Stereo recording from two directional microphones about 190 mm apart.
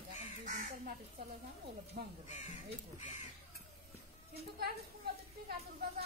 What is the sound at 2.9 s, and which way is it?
Speech, 40° left (ahead or behind).